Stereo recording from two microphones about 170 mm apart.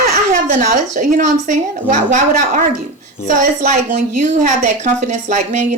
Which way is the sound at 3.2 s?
50° right (ahead or behind).